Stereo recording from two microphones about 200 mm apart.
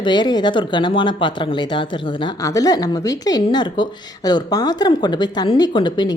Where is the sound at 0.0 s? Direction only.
20° left (ahead or behind).